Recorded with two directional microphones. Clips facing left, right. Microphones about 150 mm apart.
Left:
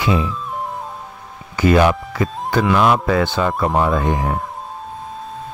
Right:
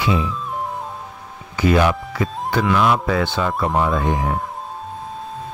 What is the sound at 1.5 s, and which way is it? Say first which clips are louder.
Speech: left 3 dB; 50° left (ahead or behind).